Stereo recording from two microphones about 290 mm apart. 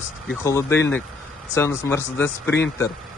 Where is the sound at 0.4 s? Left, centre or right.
Centre.